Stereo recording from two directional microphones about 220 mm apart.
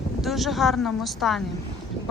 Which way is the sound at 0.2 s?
Centre (ahead or behind).